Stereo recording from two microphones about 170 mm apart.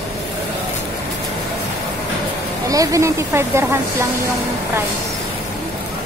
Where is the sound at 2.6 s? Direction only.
20° right (ahead or behind).